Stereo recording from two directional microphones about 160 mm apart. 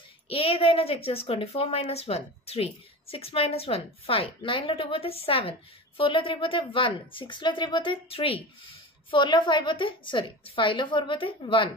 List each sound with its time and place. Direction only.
0.3 s a woman's voice: 35° left (ahead or behind)